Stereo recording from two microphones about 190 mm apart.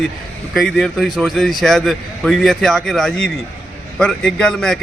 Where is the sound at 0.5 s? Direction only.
Centre (ahead or behind).